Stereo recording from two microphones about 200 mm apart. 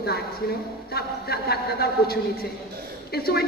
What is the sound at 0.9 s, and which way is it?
A man's voice, 50° left (ahead or behind).